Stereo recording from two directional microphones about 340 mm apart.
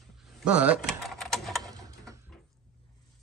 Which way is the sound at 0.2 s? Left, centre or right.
Centre.